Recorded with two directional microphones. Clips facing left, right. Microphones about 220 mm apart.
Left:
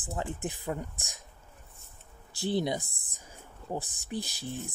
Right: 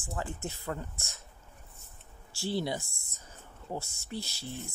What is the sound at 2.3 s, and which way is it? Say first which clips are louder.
Speech: left 3 dB; 20° left (ahead or behind).